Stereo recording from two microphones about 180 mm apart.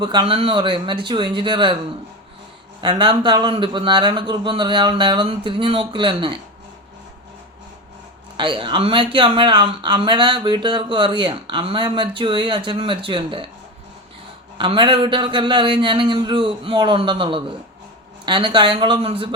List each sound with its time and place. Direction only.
0.0 s speech: 25° right (ahead or behind)
2.8 s speech: 25° right (ahead or behind)
8.4 s speech: 25° right (ahead or behind)
14.6 s speech: 25° right (ahead or behind)